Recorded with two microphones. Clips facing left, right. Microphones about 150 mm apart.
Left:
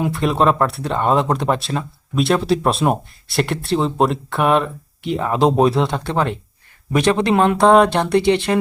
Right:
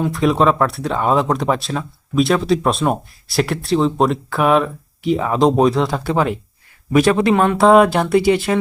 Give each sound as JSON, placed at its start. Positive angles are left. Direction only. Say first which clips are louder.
{"t": 0.0, "sound": "speech", "louder": "right 2 dB", "side_deg": 0}